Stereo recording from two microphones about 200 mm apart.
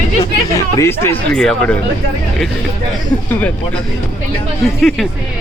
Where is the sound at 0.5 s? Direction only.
15° left (ahead or behind).